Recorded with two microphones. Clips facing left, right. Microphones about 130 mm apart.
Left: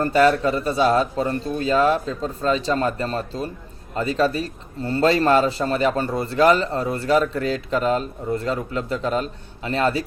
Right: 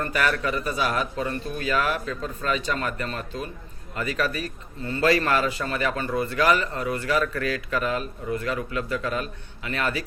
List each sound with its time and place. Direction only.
0.0 s a man's voice: 30° left (ahead or behind)